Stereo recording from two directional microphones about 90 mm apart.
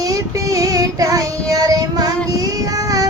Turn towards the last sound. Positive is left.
turn(degrees=-40)  # may be behind; listen again after turning